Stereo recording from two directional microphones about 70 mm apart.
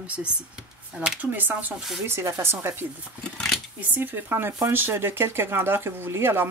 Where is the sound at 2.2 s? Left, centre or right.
Right.